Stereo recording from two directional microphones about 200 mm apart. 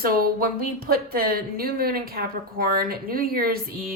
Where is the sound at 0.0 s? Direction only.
45° right (ahead or behind).